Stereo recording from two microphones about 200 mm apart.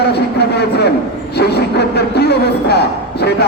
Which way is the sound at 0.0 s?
55° left (ahead or behind).